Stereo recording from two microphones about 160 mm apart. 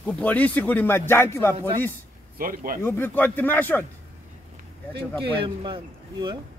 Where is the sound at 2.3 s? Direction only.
60° right (ahead or behind).